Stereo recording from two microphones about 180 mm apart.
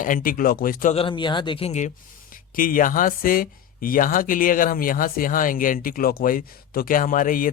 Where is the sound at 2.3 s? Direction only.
50° left (ahead or behind).